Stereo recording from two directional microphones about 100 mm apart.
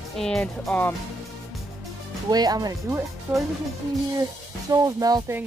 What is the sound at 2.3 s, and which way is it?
Speech, 40° right (ahead or behind).